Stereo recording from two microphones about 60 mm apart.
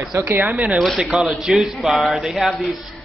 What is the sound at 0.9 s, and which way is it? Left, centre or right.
A man's voice, centre.